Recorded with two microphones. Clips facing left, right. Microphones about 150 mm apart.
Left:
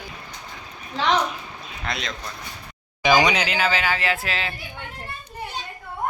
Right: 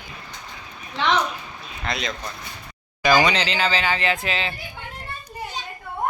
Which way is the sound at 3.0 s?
15° left (ahead or behind).